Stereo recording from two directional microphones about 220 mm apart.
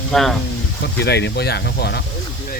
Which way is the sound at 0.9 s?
50° left (ahead or behind).